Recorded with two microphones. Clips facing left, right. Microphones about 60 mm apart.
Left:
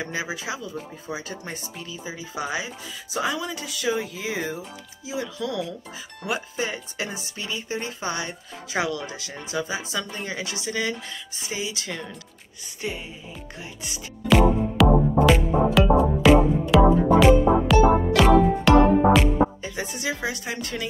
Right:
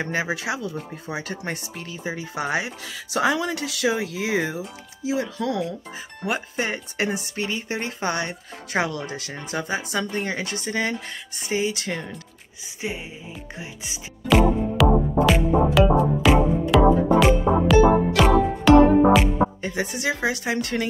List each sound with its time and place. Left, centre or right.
0.0 s speech: right
1.0 s speech: right
5.2 s speech: right
12.8 s music: centre
14.3 s music: centre
19.6 s speech: right